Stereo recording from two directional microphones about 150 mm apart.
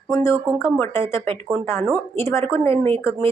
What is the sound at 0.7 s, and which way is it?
A woman's voice, 15° left (ahead or behind).